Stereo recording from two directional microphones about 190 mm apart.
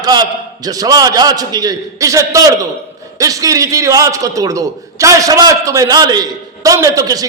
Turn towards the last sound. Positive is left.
turn(degrees=-20)  # may be behind; listen again after turning